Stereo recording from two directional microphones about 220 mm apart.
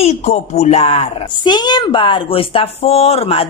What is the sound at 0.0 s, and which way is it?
Speech, 30° left (ahead or behind).